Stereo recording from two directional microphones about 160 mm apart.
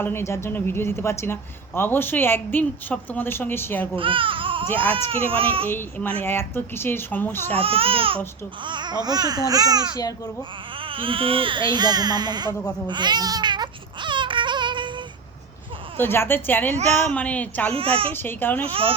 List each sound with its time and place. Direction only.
0.0 s a woman's voice: 15° left (ahead or behind)
3.9 s speech: 30° right (ahead or behind)
4.7 s a woman's voice: 10° left (ahead or behind)
5.3 s speech: 35° right (ahead or behind)
5.6 s a woman's voice: 10° left (ahead or behind)
7.5 s speech: 35° right (ahead or behind)
12.9 s baby cry: 25° right (ahead or behind)
16.0 s a woman's voice: 15° left (ahead or behind)
16.7 s a woman's voice: 45° right (ahead or behind)
17.1 s a woman's voice: 10° left (ahead or behind)
17.7 s speech: 35° right (ahead or behind)
18.1 s a woman's voice: 10° left (ahead or behind)
18.6 s speech: 35° right (ahead or behind)